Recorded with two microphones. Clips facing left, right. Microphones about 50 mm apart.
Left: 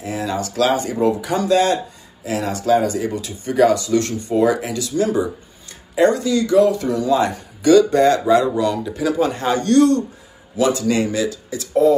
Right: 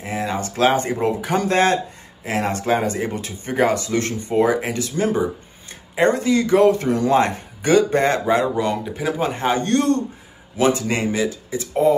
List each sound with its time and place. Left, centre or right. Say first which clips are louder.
0.0 s speech: left 1 dB; right